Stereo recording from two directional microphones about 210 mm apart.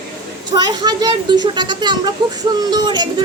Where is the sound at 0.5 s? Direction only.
20° right (ahead or behind).